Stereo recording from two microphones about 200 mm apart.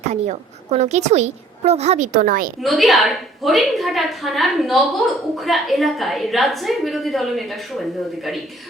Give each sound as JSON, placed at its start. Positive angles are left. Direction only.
{"t": 0.1, "sound": "a woman's voice", "side_deg": -35}
{"t": 2.6, "sound": "a woman's voice", "side_deg": 0}